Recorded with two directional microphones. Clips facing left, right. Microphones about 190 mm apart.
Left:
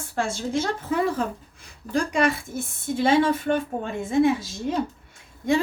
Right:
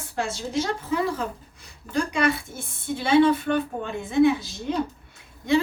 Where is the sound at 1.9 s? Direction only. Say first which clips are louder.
Left 1 dB; 40° left (ahead or behind).